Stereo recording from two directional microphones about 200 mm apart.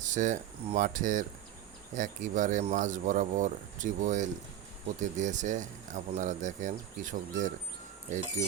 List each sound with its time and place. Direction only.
0.0 s speech: 40° right (ahead or behind)